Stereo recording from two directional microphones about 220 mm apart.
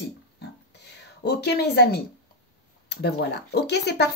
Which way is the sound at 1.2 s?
50° left (ahead or behind).